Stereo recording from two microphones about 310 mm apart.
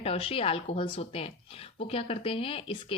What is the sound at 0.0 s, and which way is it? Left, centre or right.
Speech, centre.